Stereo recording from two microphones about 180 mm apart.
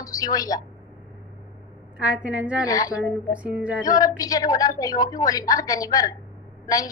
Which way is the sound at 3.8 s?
20° left (ahead or behind).